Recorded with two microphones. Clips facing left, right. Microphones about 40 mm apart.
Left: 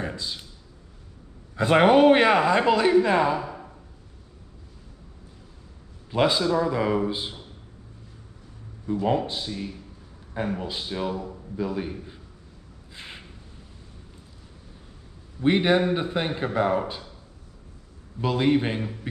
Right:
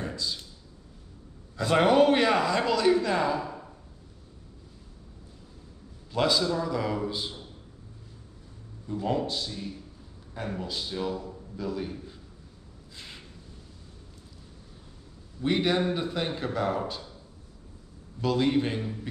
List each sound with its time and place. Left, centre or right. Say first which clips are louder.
0.0 s a sound: left 2 dB; left
1.6 s speech: left 4 dB; left
6.1 s speech: left 4 dB; left
9.0 s speech: left 3 dB; left
12.9 s a sound: left 4 dB; left
15.4 s speech: left 5 dB; left
18.2 s speech: left 3 dB; left